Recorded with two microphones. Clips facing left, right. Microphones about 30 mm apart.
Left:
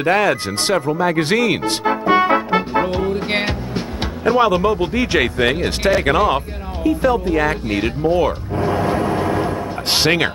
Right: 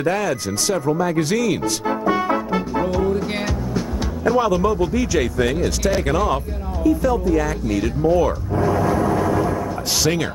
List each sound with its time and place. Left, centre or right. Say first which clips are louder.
0.0 s speech: left 5 dB; left